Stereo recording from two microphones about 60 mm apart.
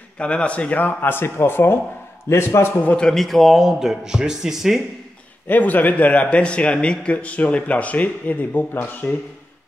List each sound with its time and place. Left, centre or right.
0.2 s a man's voice: centre; by 2.7 s left
3.0 s speech: centre
5.5 s a man's voice: left